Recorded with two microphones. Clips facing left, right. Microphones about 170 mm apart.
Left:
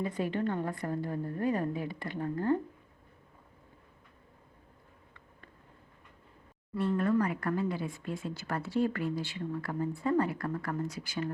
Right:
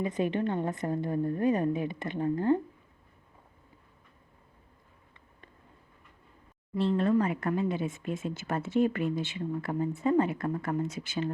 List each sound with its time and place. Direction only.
0.0 s speech: 20° right (ahead or behind)
6.7 s speech: 25° right (ahead or behind)